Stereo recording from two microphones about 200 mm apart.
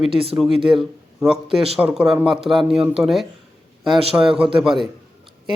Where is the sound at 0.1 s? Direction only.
25° right (ahead or behind).